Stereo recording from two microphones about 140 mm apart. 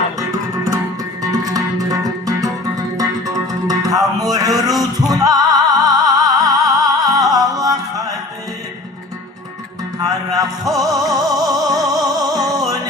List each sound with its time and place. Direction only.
0.2 s music: 25° right (ahead or behind)
10.0 s music: 25° right (ahead or behind)